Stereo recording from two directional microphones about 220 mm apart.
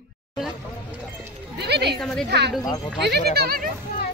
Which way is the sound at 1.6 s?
50° right (ahead or behind).